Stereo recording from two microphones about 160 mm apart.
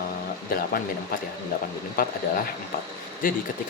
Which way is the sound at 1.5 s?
60° left (ahead or behind).